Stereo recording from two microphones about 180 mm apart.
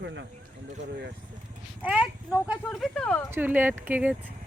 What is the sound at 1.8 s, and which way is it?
Speech, 5° right (ahead or behind).